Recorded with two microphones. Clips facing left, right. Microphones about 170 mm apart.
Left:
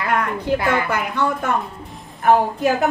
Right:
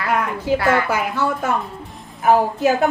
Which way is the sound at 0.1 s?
Centre (ahead or behind).